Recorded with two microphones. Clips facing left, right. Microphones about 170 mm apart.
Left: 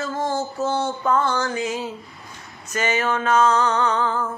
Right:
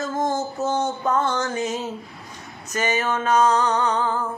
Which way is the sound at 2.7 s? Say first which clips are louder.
Left 1 dB; 15° right (ahead or behind).